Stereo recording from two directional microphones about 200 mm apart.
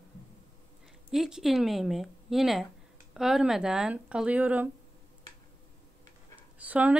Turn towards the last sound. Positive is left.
turn(degrees=-5)  # may be behind; listen again after turning